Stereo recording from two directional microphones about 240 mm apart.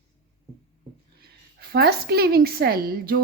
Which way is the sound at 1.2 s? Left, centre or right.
Right.